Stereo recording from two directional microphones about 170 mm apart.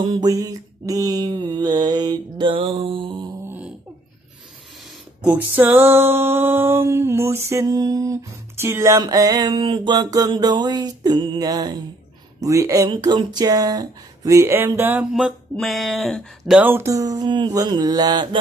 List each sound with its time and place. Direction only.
0.0 s music: 25° right (ahead or behind)
3.4 s a sound: 10° right (ahead or behind)
5.2 s music: 10° right (ahead or behind); by 18.4 s 25° right (ahead or behind)